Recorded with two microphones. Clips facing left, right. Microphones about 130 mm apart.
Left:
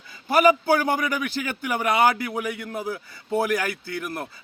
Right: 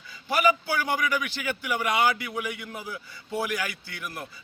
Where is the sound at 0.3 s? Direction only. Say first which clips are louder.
Left 6 dB; 50° left (ahead or behind).